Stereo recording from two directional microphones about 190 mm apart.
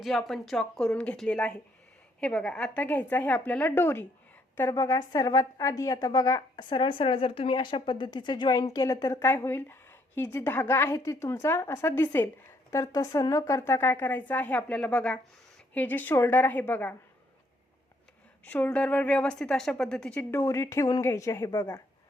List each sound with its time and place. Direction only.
0.0 s a woman's voice: centre (ahead or behind)
18.4 s a woman's voice: 10° left (ahead or behind)